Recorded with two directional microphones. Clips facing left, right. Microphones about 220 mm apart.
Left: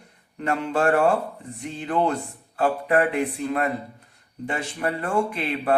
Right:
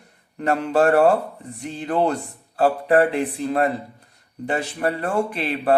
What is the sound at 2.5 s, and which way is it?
Speech, 35° right (ahead or behind).